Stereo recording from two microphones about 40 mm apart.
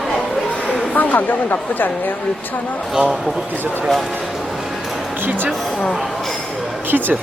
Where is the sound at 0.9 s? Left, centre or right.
Left.